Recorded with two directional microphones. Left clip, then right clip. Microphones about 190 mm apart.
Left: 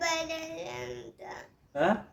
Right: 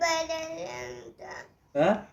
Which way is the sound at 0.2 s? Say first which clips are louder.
Right 3 dB; 40° left (ahead or behind).